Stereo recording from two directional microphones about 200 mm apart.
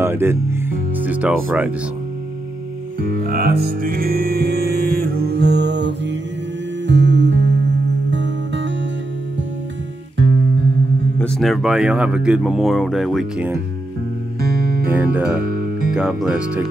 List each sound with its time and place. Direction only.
0.0 s speech: 10° right (ahead or behind)
3.0 s music: 45° right (ahead or behind); by 8.7 s 65° right (ahead or behind)
11.1 s speech: 5° left (ahead or behind)
15.0 s speech: 10° right (ahead or behind)